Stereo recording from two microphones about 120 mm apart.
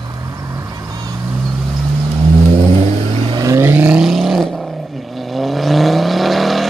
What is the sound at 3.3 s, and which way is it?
Vehicle, 30° right (ahead or behind).